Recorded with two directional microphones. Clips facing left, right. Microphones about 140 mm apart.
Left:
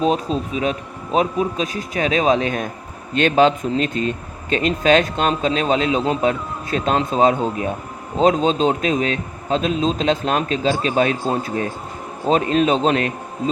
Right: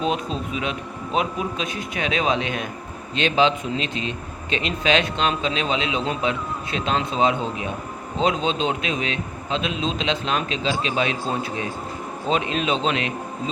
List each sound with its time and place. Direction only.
0.0 s a man's voice: 40° left (ahead or behind)